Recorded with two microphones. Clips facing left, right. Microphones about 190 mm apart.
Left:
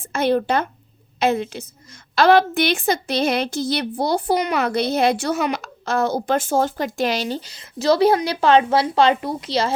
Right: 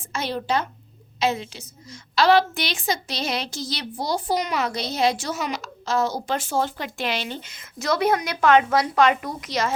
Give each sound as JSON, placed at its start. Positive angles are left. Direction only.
{"t": 0.0, "sound": "a woman's voice", "side_deg": 55}